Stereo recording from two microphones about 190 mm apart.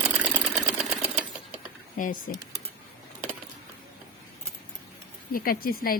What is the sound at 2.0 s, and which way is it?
Speech, 45° left (ahead or behind).